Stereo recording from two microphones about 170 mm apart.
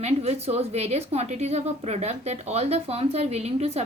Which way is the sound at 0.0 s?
40° right (ahead or behind).